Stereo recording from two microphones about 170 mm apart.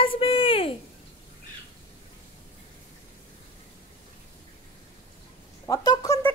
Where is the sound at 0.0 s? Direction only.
30° left (ahead or behind).